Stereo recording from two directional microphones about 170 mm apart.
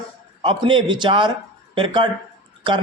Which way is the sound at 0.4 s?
30° right (ahead or behind).